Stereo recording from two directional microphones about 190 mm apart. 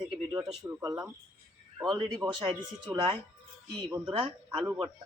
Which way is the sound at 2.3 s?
25° right (ahead or behind).